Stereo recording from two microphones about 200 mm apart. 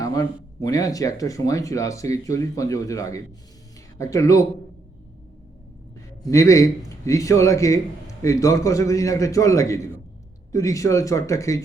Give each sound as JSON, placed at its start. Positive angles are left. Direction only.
{"t": 0.0, "sound": "a man's voice", "side_deg": 15}
{"t": 6.2, "sound": "a man's voice", "side_deg": 15}